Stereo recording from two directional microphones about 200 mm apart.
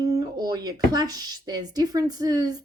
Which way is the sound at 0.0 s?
20° right (ahead or behind).